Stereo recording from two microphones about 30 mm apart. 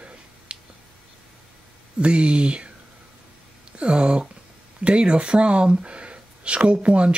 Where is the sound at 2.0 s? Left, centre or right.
Right.